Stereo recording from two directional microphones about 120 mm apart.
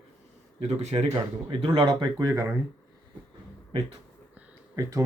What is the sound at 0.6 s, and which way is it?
Speech, 65° right (ahead or behind).